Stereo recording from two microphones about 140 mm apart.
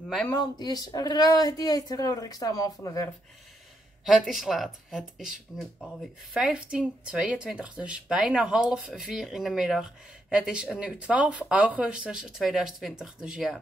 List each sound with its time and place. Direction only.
0.4 s speech: 30° left (ahead or behind)
4.0 s speech: centre (ahead or behind)